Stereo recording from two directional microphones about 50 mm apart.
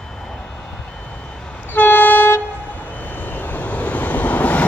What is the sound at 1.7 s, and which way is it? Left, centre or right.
Vehicle, left.